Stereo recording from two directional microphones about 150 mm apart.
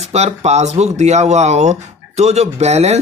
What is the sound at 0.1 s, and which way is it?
Speech, 45° right (ahead or behind).